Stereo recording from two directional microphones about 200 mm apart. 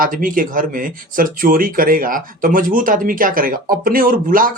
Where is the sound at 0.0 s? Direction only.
45° right (ahead or behind).